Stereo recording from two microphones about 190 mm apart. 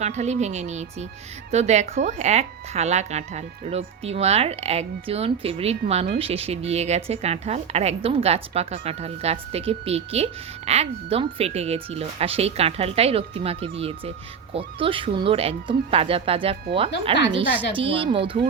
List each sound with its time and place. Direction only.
0.0 s speech: 35° right (ahead or behind)